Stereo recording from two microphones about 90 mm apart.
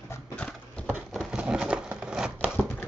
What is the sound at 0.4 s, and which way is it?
Horse, 10° left (ahead or behind).